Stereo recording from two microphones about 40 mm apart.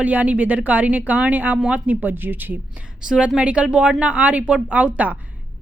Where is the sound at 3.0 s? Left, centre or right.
Right.